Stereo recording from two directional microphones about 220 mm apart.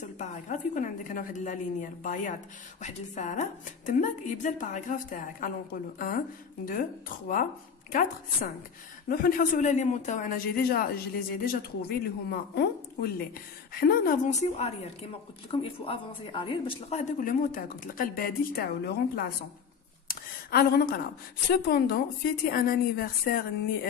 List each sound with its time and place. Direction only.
0.0 s a woman's voice: 35° left (ahead or behind)
6.6 s a woman's voice: 40° left (ahead or behind)
20.1 s a sound: 45° left (ahead or behind)
21.5 s a woman's voice: 45° left (ahead or behind)